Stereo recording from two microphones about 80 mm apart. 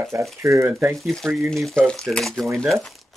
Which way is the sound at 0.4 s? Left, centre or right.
Right.